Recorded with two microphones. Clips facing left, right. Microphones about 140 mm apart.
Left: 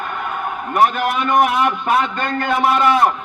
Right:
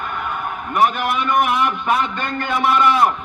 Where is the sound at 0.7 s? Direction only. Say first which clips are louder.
Left 2 dB; 45° left (ahead or behind).